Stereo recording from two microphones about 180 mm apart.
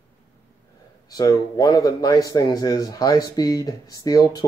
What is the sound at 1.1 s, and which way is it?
A man's voice, 20° left (ahead or behind).